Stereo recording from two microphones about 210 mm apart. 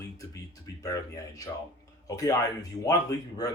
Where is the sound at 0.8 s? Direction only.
15° left (ahead or behind).